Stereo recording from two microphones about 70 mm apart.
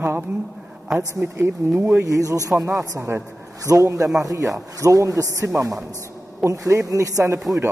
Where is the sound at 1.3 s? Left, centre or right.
Right.